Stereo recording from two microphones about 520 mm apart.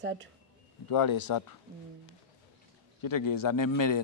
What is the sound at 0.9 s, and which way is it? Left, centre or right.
Speech, left.